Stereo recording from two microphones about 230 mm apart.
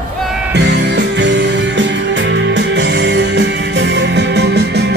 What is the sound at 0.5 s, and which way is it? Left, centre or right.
Music, right.